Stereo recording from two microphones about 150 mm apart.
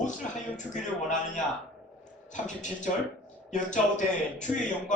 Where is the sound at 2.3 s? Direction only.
55° left (ahead or behind).